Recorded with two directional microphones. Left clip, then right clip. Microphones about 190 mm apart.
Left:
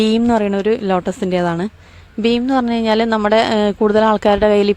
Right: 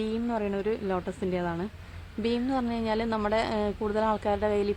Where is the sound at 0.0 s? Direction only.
55° left (ahead or behind).